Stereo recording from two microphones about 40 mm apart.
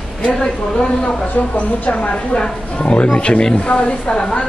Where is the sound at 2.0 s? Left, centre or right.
Left.